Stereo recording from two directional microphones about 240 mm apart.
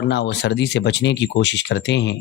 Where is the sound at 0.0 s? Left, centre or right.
Left.